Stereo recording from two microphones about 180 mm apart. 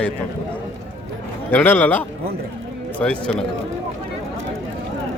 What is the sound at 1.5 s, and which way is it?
A man's voice, 10° left (ahead or behind).